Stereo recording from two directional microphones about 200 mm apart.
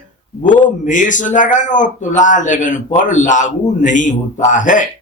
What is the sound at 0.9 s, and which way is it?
Speech, 40° left (ahead or behind).